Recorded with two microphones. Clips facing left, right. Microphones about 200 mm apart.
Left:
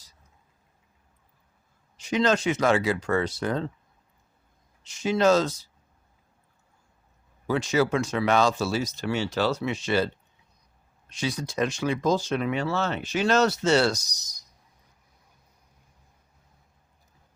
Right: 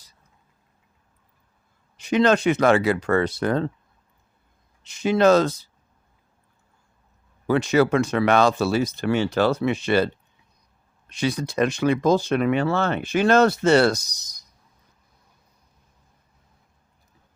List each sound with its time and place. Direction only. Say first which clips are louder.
2.0 s speech: right 5 dB; 60° right (ahead or behind)
4.8 s speech: right 4 dB; 60° right (ahead or behind)
7.4 s speech: right 5 dB; 60° right (ahead or behind)
11.1 s speech: right 5 dB; 60° right (ahead or behind)